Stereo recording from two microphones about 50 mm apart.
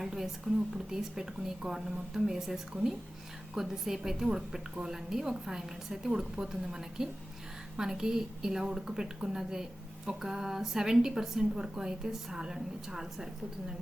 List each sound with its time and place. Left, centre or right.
0.0 s a woman's voice: centre